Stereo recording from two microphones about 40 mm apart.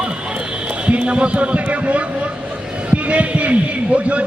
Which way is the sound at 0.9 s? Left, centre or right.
Right.